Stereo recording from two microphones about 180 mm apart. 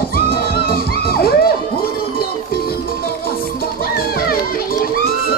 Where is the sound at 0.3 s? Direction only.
55° left (ahead or behind).